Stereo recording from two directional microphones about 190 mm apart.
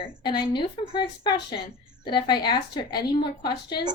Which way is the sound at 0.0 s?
25° left (ahead or behind).